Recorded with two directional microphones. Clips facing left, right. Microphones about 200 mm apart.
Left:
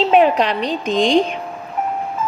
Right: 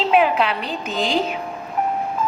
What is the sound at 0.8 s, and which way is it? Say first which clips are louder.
Speech: left 7 dB; 5° right (ahead or behind).